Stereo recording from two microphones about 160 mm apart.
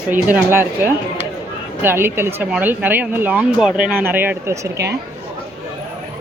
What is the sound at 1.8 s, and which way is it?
Speech, 15° right (ahead or behind).